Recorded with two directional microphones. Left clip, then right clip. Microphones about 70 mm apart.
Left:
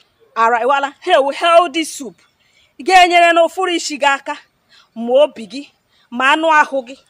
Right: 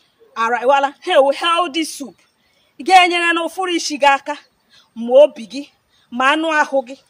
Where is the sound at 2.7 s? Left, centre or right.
Left.